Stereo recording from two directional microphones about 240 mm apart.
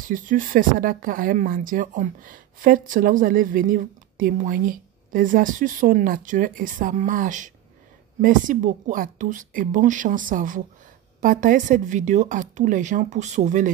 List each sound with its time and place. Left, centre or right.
0.0 s speech: right